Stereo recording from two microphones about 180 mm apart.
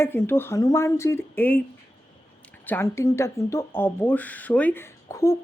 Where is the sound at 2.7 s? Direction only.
15° left (ahead or behind).